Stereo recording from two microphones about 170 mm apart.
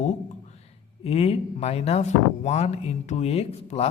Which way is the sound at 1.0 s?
35° left (ahead or behind).